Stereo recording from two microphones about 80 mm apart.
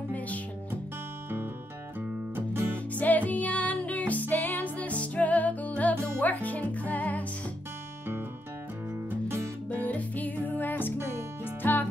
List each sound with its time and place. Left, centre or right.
2.0 s music: right
2.7 s music: centre
6.2 s speech: centre
9.1 s music: right
9.7 s music: centre
11.0 s music: right
11.6 s music: left